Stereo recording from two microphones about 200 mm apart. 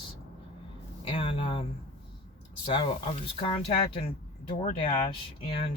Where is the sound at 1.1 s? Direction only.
25° left (ahead or behind).